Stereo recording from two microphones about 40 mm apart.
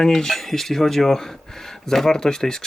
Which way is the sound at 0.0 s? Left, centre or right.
Centre.